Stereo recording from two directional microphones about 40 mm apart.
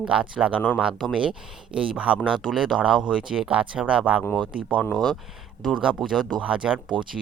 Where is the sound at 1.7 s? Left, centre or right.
Right.